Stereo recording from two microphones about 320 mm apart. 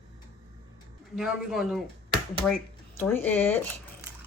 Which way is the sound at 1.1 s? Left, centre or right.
Centre.